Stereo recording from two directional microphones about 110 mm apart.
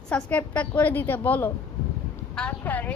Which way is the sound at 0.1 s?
15° left (ahead or behind).